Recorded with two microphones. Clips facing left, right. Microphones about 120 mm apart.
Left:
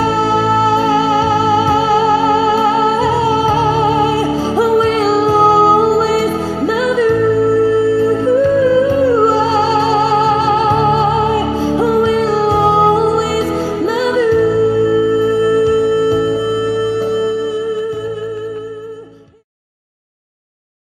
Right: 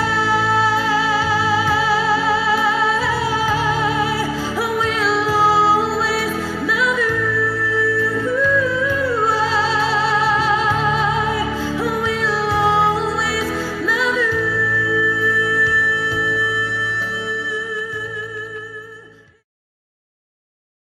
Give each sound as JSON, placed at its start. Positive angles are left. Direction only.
{"t": 0.0, "sound": "music", "side_deg": 35}
{"t": 7.4, "sound": "music", "side_deg": 50}
{"t": 7.9, "sound": "music", "side_deg": 30}
{"t": 16.3, "sound": "music", "side_deg": 25}